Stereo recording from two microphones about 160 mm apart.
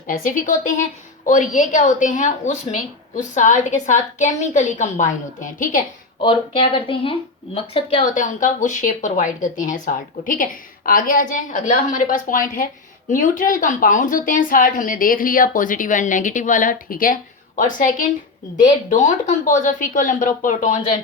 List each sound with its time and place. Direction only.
0.1 s a woman's voice: 60° left (ahead or behind)
6.2 s speech: 35° left (ahead or behind)
8.0 s a woman's voice: 55° left (ahead or behind)